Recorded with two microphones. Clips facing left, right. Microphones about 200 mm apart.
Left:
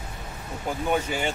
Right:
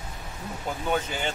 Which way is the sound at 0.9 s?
10° left (ahead or behind).